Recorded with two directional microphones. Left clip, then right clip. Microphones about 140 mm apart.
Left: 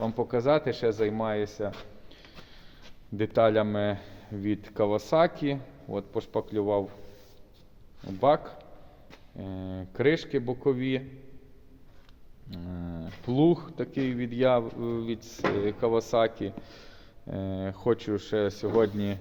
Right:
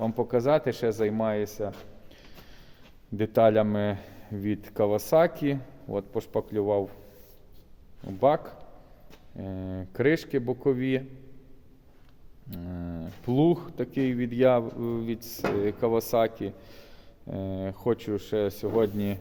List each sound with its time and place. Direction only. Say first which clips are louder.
0.0 s speech: right 1 dB; 45° right (ahead or behind)
3.2 s speech: right 2 dB; 60° right (ahead or behind)
8.2 s speech: even; 50° right (ahead or behind)
12.5 s speech: right 2 dB; 55° right (ahead or behind); by 19.2 s 35° right (ahead or behind)